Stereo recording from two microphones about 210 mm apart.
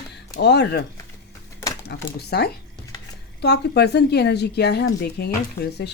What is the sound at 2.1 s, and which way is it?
A woman's voice, 50° left (ahead or behind).